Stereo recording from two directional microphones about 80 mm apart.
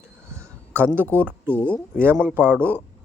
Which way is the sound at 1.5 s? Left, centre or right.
Centre.